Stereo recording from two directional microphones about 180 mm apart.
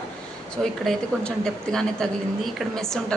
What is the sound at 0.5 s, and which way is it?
A woman's voice, 5° left (ahead or behind).